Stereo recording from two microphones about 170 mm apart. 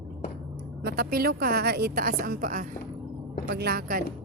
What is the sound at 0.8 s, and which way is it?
A woman's voice, 65° right (ahead or behind).